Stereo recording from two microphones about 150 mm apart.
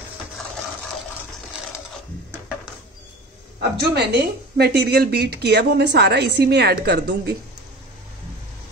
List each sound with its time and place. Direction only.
3.8 s a woman's voice: 90° right